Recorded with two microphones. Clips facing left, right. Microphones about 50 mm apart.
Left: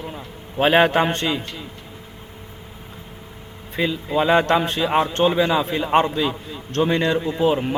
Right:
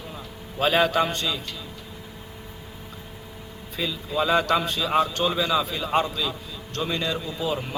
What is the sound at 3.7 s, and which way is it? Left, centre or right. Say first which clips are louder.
A man's voice: left 6 dB; left.